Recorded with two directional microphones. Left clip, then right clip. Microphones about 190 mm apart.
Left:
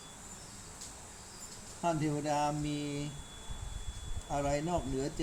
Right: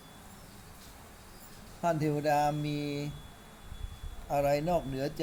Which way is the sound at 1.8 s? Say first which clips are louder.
Right 4 dB; 45° right (ahead or behind).